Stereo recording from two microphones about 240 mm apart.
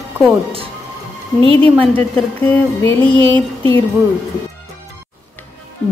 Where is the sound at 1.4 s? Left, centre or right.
Right.